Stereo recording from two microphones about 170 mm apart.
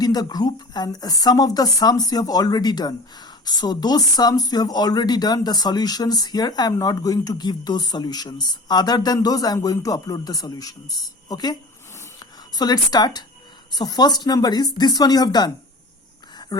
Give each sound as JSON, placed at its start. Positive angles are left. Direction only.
{"t": 0.0, "sound": "speech", "side_deg": 20}
{"t": 12.5, "sound": "speech", "side_deg": 25}